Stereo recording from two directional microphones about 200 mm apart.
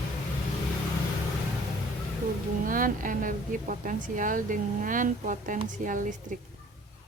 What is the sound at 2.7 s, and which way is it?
A woman's voice, 45° right (ahead or behind).